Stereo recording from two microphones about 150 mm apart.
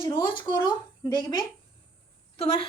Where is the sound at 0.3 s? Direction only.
30° left (ahead or behind).